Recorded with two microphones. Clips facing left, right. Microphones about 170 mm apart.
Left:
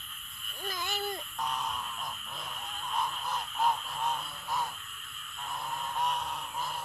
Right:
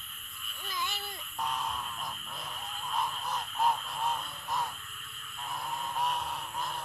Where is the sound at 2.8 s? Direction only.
Centre (ahead or behind).